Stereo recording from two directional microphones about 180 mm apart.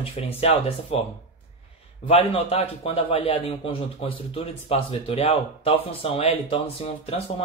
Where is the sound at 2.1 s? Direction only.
35° left (ahead or behind).